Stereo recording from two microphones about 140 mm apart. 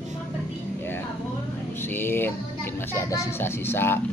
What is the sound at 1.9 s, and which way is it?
Music, 15° left (ahead or behind).